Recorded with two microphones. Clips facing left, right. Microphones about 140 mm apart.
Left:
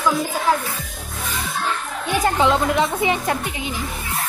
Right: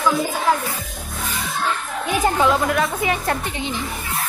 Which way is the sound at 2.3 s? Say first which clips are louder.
Left 2 dB; 20° left (ahead or behind).